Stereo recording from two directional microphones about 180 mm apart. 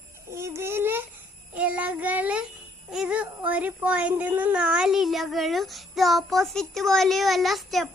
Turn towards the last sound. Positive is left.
turn(degrees=0)  # may be behind; listen again after turning